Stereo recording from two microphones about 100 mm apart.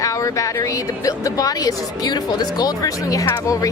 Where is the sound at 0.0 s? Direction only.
35° left (ahead or behind).